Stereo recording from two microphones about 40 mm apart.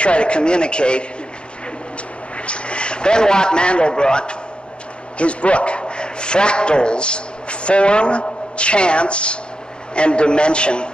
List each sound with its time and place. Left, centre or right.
0.0 s a man's voice: left
2.3 s a man's voice: left